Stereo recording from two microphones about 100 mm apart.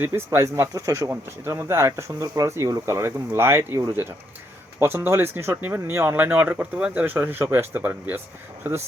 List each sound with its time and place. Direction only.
0.0 s speech: 25° right (ahead or behind)